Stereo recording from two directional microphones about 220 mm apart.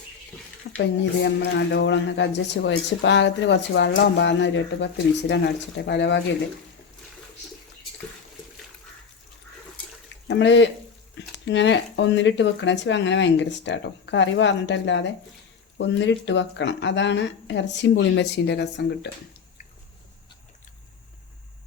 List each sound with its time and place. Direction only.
0.8 s speech: 55° left (ahead or behind)
10.2 s speech: 55° left (ahead or behind)